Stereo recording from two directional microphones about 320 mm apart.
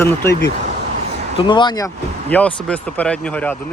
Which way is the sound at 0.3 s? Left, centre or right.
Left.